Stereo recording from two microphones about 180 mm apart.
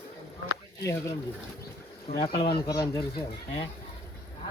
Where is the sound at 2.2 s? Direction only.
30° left (ahead or behind).